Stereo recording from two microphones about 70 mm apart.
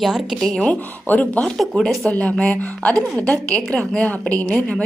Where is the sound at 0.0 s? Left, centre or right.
Centre.